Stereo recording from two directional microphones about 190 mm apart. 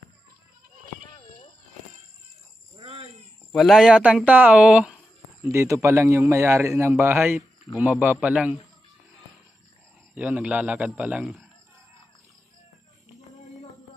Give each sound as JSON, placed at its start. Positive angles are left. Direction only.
{"t": 2.8, "sound": "a sound", "side_deg": -35}
{"t": 3.5, "sound": "a man's voice", "side_deg": 0}
{"t": 10.1, "sound": "a man's voice", "side_deg": -5}